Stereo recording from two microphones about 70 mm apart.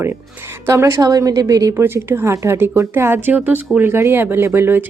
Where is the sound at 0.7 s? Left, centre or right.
Right.